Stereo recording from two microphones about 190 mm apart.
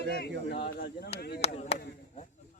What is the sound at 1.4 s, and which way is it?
Speech, 35° left (ahead or behind).